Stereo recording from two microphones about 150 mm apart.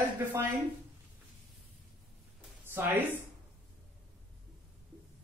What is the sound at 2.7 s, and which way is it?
Speech, 15° right (ahead or behind).